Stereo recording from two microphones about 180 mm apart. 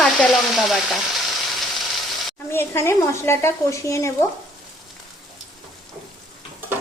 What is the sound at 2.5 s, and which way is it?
A woman's voice, 15° left (ahead or behind).